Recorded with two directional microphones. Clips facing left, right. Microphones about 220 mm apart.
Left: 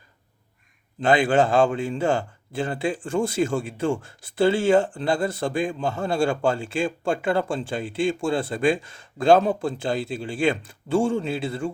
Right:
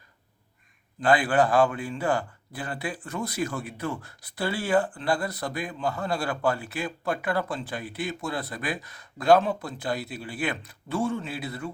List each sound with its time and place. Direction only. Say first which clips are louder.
1.0 s speech: left 3 dB; 25° left (ahead or behind)